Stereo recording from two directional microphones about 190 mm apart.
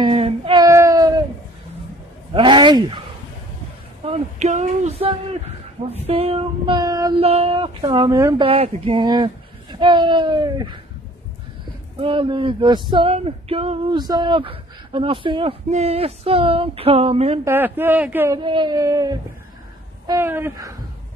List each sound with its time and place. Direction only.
0.0 s a sound: 25° right (ahead or behind)
2.3 s a sound: 25° right (ahead or behind)
4.0 s speech: 35° right (ahead or behind)
7.2 s speech: 30° right (ahead or behind)
8.5 s speech: 30° right (ahead or behind)
12.0 s speech: 30° right (ahead or behind)
17.5 s speech: 10° right (ahead or behind)
18.4 s speech: 25° right (ahead or behind)